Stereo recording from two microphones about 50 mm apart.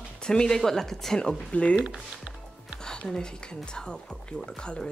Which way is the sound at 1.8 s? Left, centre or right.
Right.